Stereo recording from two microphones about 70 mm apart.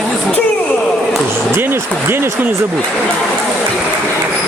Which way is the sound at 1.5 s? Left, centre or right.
Right.